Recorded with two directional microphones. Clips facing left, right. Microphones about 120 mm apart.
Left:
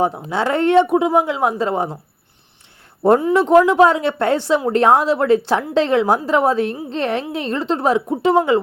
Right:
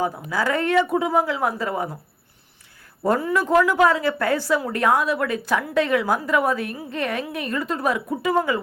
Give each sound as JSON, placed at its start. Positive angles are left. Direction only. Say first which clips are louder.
{"t": 0.0, "sound": "a woman's voice", "louder": "left 5 dB", "side_deg": 25}
{"t": 3.0, "sound": "a woman's voice", "louder": "left 7 dB", "side_deg": 25}